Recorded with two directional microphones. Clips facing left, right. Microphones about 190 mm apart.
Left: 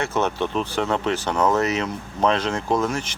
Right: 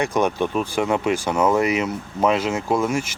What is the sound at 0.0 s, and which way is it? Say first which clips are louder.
Speech: right 3 dB; 15° right (ahead or behind).